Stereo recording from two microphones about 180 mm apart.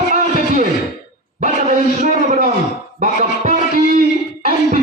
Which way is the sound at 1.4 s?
40° right (ahead or behind).